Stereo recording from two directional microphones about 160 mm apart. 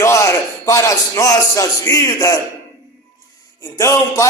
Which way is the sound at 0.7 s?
20° left (ahead or behind).